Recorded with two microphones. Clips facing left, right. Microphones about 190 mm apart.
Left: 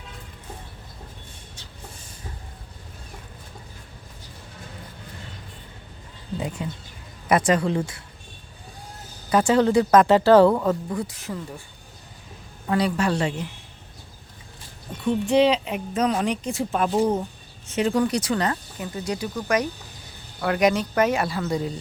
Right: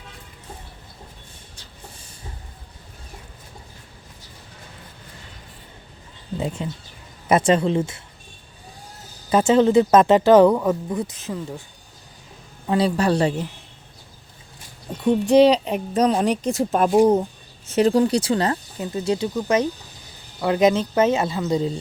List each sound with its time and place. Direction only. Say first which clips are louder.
6.4 s speech: right 4 dB; 25° right (ahead or behind)
9.3 s speech: right 3 dB; 20° right (ahead or behind)
12.6 s speech: right 3 dB; 25° right (ahead or behind)
15.0 s speech: right 5 dB; 40° right (ahead or behind); by 21.7 s 20° right (ahead or behind)